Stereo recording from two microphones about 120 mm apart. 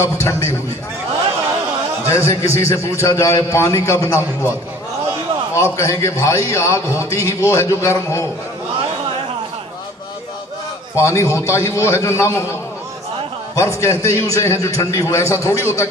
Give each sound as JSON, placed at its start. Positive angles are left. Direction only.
{"t": 0.0, "sound": "a man's voice", "side_deg": 25}
{"t": 2.0, "sound": "a man's voice", "side_deg": 25}
{"t": 5.5, "sound": "a man's voice", "side_deg": 25}
{"t": 11.0, "sound": "a man's voice", "side_deg": 25}
{"t": 13.6, "sound": "a man's voice", "side_deg": 25}